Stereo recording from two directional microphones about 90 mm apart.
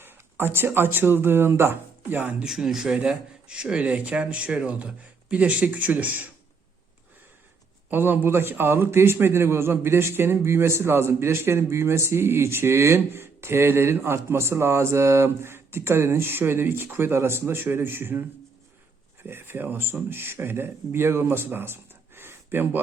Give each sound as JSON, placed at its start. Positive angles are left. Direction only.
{"t": 0.0, "sound": "speech", "side_deg": -25}
{"t": 2.4, "sound": "speech", "side_deg": -5}
{"t": 7.9, "sound": "a man's voice", "side_deg": -20}